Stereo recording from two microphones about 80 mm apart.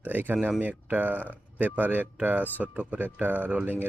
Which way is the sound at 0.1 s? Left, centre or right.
Right.